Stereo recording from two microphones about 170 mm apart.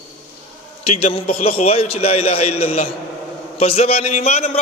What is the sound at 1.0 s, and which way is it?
A man's voice, 35° left (ahead or behind).